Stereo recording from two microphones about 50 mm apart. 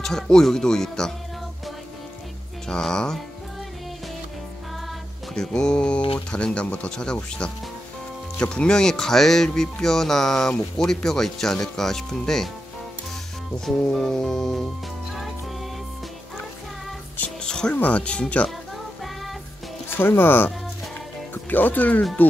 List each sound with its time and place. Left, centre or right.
0.0 s speech: centre
2.7 s speech: centre
5.3 s speech: centre
8.4 s speech: centre
13.7 s music: centre
17.4 s music: centre
17.7 s speech: left
19.9 s speech: left